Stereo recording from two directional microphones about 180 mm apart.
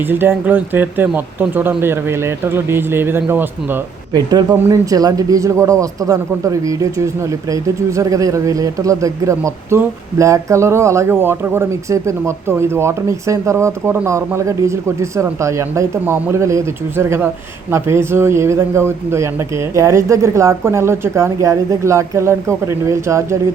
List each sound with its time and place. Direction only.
0.1 s a man's voice: 10° right (ahead or behind)
4.1 s a man's voice: 20° right (ahead or behind)